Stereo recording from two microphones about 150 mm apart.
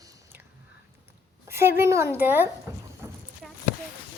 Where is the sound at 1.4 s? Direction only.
15° right (ahead or behind).